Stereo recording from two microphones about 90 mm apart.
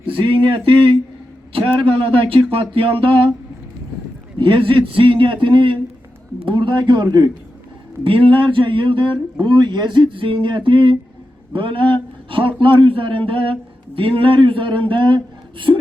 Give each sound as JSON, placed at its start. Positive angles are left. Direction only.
{"t": 0.0, "sound": "a man's voice", "side_deg": -80}
{"t": 4.4, "sound": "a man's voice", "side_deg": -70}
{"t": 8.0, "sound": "a man's voice", "side_deg": -80}